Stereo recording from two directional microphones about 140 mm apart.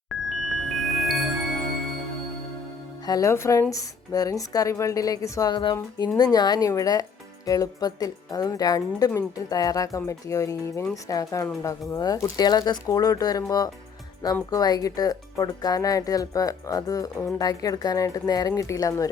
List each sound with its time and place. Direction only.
0.1 s music: centre (ahead or behind)
3.1 s speech: 20° left (ahead or behind)